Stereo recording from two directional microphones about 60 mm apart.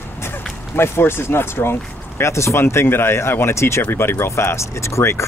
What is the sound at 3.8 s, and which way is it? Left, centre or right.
Speech, left.